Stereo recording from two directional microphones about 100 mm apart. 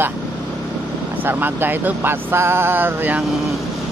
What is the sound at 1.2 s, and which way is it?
Speech, 20° right (ahead or behind).